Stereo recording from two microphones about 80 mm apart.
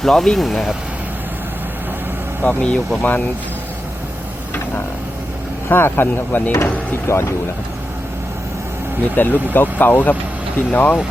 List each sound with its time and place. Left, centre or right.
0.0 s speech: centre
2.4 s speech: centre
5.6 s speech: left
9.1 s speech: left